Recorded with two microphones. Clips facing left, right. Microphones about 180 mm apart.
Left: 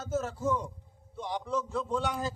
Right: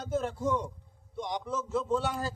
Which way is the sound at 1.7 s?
Centre (ahead or behind).